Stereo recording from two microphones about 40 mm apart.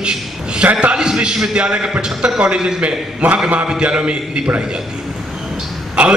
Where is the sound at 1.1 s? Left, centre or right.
Centre.